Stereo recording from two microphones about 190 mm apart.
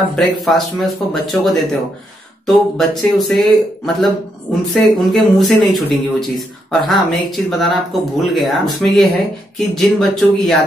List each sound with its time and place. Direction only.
0.1 s speech: centre (ahead or behind)